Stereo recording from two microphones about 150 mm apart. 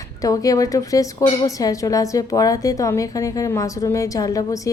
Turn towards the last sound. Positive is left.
turn(degrees=20)  # may be behind; listen again after turning